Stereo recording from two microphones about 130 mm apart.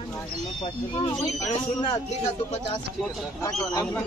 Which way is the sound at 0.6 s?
40° left (ahead or behind).